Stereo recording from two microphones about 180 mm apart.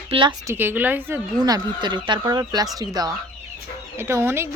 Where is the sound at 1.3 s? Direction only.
20° right (ahead or behind).